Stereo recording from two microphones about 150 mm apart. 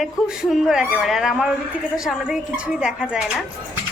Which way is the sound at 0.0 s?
5° right (ahead or behind).